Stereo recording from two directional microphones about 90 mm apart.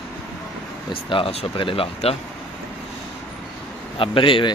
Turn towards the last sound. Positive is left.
turn(degrees=70)  # may be behind; listen again after turning